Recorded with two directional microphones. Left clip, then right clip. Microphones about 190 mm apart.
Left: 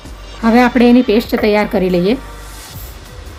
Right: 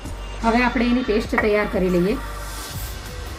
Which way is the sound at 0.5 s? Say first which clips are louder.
Left 13 dB; 60° left (ahead or behind).